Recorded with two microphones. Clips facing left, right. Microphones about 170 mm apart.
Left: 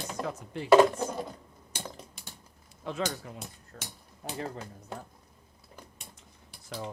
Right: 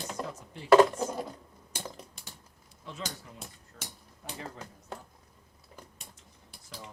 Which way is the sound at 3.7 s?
55° left (ahead or behind).